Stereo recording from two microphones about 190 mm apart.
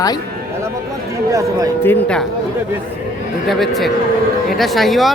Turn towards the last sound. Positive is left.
turn(degrees=0)  # may be behind; listen again after turning